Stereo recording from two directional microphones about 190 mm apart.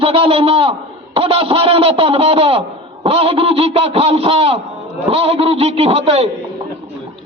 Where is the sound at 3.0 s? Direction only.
30° right (ahead or behind).